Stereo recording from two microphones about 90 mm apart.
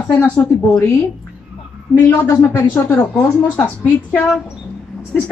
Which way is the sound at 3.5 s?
25° left (ahead or behind).